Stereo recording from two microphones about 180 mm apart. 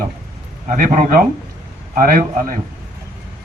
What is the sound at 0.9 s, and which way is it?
Speech, 50° right (ahead or behind).